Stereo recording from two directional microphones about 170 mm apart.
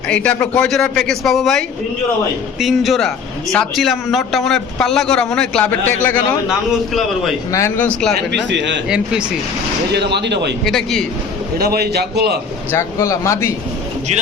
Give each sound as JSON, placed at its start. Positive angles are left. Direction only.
{"t": 0.1, "sound": "a man's voice", "side_deg": 5}
{"t": 6.7, "sound": "a man's voice", "side_deg": 0}
{"t": 7.5, "sound": "speech", "side_deg": 15}
{"t": 8.4, "sound": "a man's voice", "side_deg": -90}
{"t": 9.9, "sound": "speech", "side_deg": -80}
{"t": 10.6, "sound": "a man's voice", "side_deg": 0}
{"t": 11.5, "sound": "a man's voice", "side_deg": -65}
{"t": 12.7, "sound": "speech", "side_deg": 15}